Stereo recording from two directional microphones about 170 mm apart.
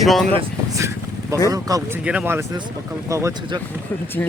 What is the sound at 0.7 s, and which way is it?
Vehicle, 15° right (ahead or behind).